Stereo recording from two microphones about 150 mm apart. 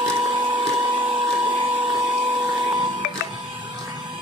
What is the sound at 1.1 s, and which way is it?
Vacuum cleaner, 35° right (ahead or behind).